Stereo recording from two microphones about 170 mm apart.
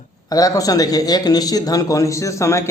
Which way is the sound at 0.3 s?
20° left (ahead or behind).